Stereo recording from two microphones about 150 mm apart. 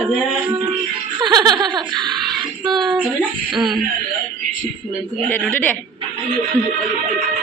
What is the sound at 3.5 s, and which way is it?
Speech, 30° right (ahead or behind).